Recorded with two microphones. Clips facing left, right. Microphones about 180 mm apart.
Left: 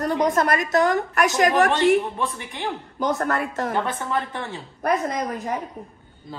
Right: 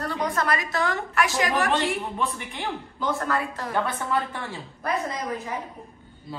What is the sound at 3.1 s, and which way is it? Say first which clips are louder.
Speech: left 3 dB; 50° left (ahead or behind).